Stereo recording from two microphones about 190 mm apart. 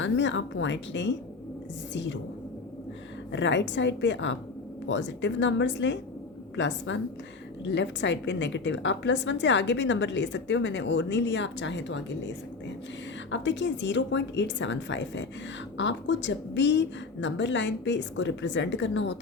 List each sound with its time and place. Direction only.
0.0 s a woman's voice: 75° left (ahead or behind)
3.3 s a woman's voice: 70° left (ahead or behind)